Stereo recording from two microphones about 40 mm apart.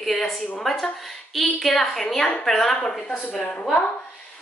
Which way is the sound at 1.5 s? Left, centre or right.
Centre.